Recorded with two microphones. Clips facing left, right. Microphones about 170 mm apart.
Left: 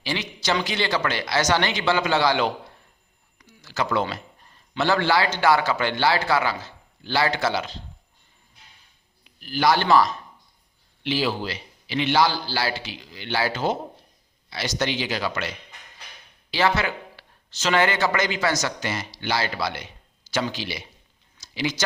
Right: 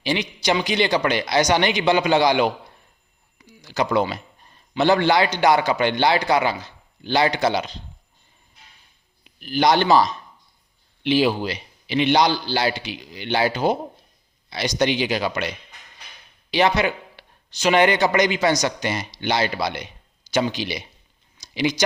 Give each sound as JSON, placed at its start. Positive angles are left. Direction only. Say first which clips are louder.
{"t": 0.0, "sound": "a man's voice", "louder": "right 5 dB", "side_deg": -15}
{"t": 3.3, "sound": "a sound", "louder": "right 4 dB", "side_deg": -15}
{"t": 4.8, "sound": "speech", "louder": "right 4 dB", "side_deg": -20}
{"t": 9.2, "sound": "a man's voice", "louder": "right 2 dB", "side_deg": -20}
{"t": 16.5, "sound": "speech", "louder": "right 3 dB", "side_deg": -20}
{"t": 21.3, "sound": "a sound", "louder": "right 5 dB", "side_deg": -15}